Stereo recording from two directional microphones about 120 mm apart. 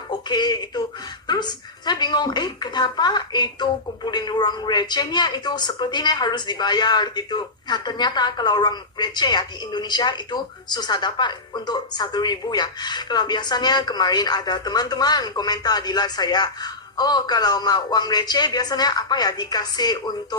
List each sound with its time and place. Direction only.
0.1 s speech: 35° left (ahead or behind)